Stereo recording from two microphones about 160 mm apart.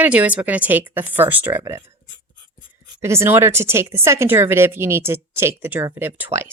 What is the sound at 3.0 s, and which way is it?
Speech, 15° right (ahead or behind).